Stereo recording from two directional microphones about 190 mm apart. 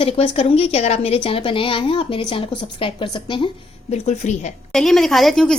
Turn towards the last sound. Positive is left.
turn(degrees=0)  # may be behind; listen again after turning